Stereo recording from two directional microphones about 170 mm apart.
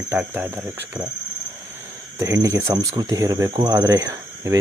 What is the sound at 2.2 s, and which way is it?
Speech, 20° right (ahead or behind).